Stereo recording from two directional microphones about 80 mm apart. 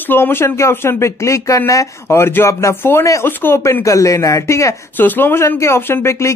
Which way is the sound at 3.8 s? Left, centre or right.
Left.